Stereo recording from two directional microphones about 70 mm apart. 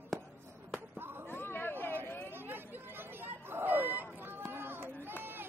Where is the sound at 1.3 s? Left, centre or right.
Left.